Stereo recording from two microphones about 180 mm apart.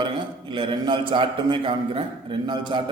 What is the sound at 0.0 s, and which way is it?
A man's voice, 25° right (ahead or behind).